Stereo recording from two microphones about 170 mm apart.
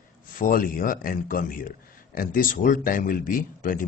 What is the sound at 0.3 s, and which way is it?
Speech, 55° left (ahead or behind).